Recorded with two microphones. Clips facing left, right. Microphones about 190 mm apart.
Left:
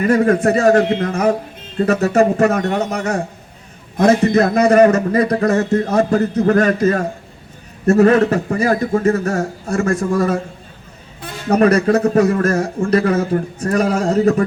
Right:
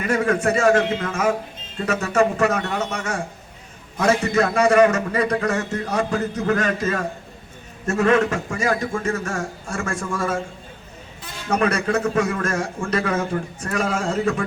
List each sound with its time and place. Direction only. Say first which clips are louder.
0.0 s a man's voice: left 7 dB; 35° left (ahead or behind)
11.4 s a man's voice: left 8 dB; 35° left (ahead or behind)